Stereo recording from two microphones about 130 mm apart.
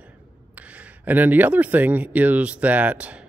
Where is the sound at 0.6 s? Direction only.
10° right (ahead or behind).